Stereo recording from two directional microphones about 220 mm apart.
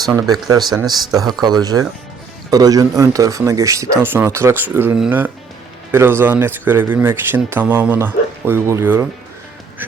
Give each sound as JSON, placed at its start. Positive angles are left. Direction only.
{"t": 0.3, "sound": "speech", "side_deg": -20}